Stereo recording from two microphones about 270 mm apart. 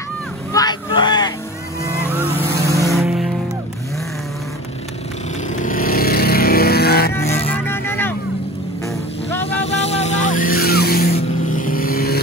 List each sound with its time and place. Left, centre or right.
0.5 s a sound: centre
2.1 s boat: centre
2.9 s music: centre
5.6 s vehicle: left
7.5 s vehicle: centre
8.8 s music: centre
9.7 s vehicle: left